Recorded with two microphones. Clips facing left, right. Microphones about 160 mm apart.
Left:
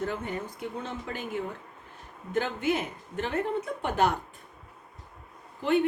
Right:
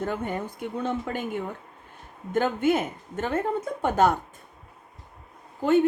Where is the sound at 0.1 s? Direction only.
55° right (ahead or behind).